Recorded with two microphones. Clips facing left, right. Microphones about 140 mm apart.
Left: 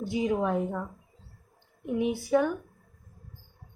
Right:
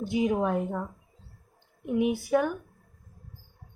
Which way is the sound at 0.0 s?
20° right (ahead or behind).